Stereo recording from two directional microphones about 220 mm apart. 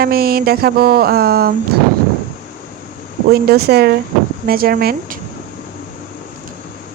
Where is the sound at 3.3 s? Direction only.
45° right (ahead or behind).